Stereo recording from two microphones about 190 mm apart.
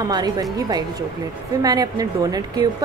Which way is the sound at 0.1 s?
20° right (ahead or behind).